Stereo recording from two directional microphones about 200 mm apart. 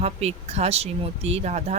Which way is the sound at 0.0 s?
30° right (ahead or behind).